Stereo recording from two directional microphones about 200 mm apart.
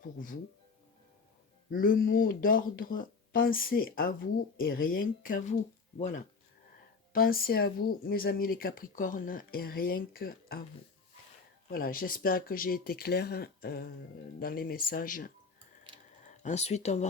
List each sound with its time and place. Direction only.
0.0 s speech: 45° left (ahead or behind)
1.7 s speech: 45° left (ahead or behind)
11.7 s speech: 45° left (ahead or behind)
16.4 s speech: 35° left (ahead or behind)